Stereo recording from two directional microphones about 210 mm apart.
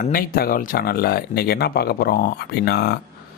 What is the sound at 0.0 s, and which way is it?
Speech, 45° left (ahead or behind).